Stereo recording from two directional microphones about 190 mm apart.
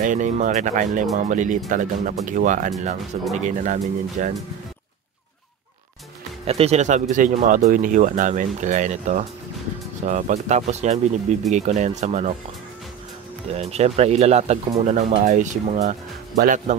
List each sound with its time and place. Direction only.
0.0 s speech: 40° right (ahead or behind)
6.4 s speech: 30° right (ahead or behind)
13.6 s speech: 35° right (ahead or behind)